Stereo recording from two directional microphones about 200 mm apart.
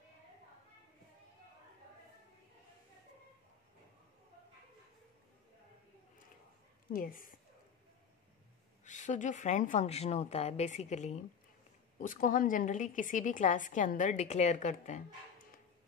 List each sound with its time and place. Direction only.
6.9 s a woman's voice: 45° left (ahead or behind)
8.8 s a woman's voice: 40° left (ahead or behind)